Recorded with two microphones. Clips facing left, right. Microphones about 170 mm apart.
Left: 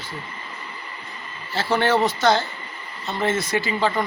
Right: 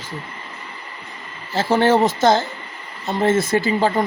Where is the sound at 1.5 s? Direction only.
45° right (ahead or behind).